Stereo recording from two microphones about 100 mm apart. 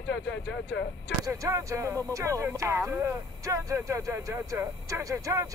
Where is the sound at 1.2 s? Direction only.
35° right (ahead or behind).